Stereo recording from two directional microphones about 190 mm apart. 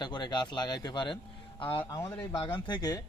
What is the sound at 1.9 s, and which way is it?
A man's voice, 15° left (ahead or behind).